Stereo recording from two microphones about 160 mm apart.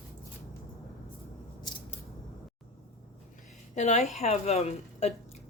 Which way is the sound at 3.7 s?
45° left (ahead or behind).